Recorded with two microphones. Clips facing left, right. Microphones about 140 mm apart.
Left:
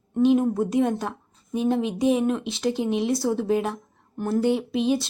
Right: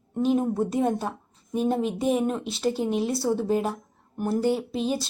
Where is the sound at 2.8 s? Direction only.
40° right (ahead or behind).